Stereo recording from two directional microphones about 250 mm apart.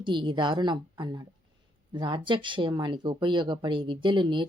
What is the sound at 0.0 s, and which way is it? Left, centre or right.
A woman's voice, centre.